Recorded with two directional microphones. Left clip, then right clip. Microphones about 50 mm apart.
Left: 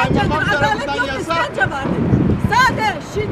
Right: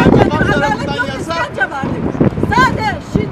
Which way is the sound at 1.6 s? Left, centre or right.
Centre.